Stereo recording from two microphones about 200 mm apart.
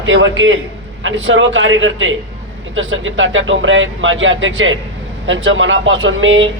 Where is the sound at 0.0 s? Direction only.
75° right (ahead or behind).